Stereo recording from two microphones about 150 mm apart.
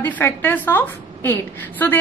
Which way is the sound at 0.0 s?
15° left (ahead or behind).